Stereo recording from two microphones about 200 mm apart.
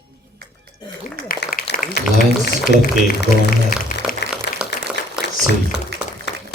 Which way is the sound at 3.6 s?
45° left (ahead or behind).